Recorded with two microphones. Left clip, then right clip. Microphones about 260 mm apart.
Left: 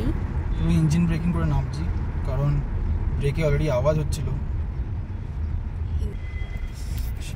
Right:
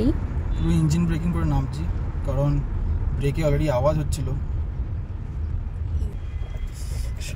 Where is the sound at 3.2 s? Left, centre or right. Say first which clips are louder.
Right 1 dB; right.